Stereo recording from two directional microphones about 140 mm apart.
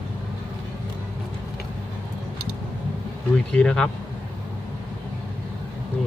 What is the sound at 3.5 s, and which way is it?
Speech, 5° left (ahead or behind).